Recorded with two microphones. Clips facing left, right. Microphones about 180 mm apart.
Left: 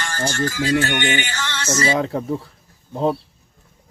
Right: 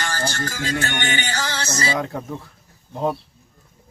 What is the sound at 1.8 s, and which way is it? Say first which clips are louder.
Speech: left 5 dB; 30° left (ahead or behind).